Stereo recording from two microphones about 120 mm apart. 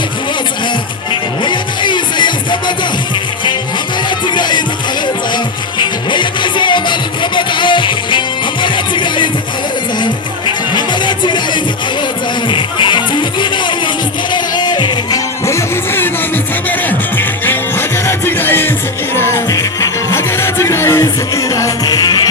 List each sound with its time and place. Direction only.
1.5 s music: 40° left (ahead or behind)
4.4 s music: 40° left (ahead or behind)
6.1 s music: 40° left (ahead or behind)
15.4 s music: 20° left (ahead or behind)
17.2 s music: 15° left (ahead or behind); by 22.2 s 35° left (ahead or behind)